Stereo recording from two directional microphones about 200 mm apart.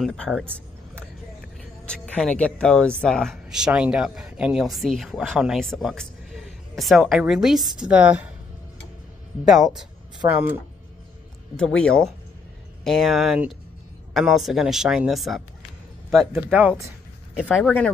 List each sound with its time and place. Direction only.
0.0 s speech: centre (ahead or behind)
1.9 s speech: 5° left (ahead or behind)
9.4 s speech: centre (ahead or behind)
16.4 s speech: 10° right (ahead or behind)
17.4 s speech: 5° left (ahead or behind)